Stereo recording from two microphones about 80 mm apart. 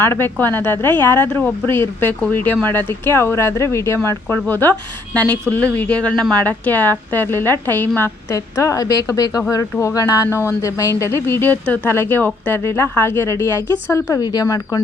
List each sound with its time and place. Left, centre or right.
0.0 s a woman's voice: left
10.2 s speech: left
14.2 s speech: left